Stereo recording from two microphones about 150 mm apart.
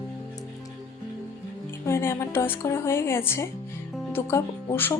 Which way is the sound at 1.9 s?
15° left (ahead or behind).